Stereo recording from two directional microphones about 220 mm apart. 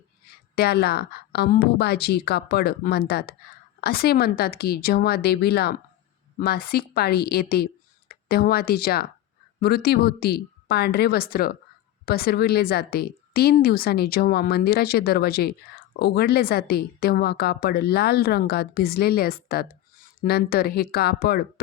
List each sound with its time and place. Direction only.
0.3 s a woman's voice: 45° left (ahead or behind)